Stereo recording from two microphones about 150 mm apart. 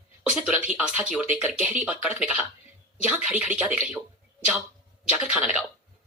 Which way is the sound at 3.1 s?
45° left (ahead or behind).